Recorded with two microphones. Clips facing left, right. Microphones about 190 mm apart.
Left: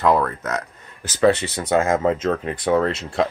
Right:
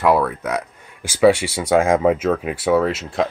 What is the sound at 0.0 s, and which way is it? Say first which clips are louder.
Speech: right 2 dB; 10° right (ahead or behind).